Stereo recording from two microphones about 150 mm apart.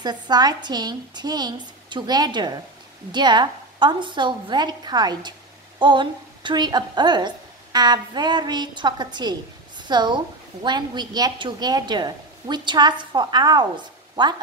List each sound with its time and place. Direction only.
0.0 s a woman's voice: 25° right (ahead or behind)